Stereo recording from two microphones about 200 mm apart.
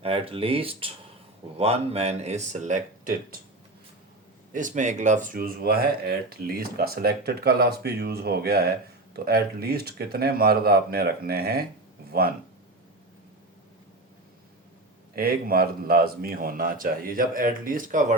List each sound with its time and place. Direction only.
0.0 s speech: 30° right (ahead or behind)
4.5 s speech: 40° right (ahead or behind)
15.1 s speech: 50° right (ahead or behind)